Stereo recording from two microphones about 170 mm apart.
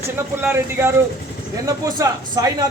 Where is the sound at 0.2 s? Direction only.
15° right (ahead or behind).